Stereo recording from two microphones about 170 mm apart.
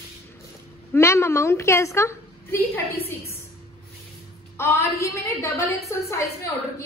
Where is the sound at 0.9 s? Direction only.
15° left (ahead or behind).